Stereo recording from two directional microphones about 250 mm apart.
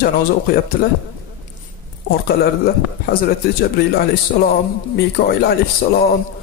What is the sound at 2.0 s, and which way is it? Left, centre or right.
A man's voice, left.